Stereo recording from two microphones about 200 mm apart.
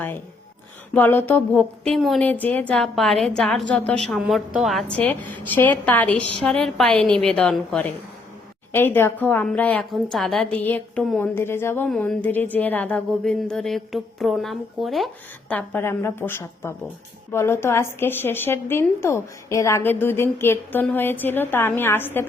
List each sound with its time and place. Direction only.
0.9 s a woman's voice: 10° left (ahead or behind)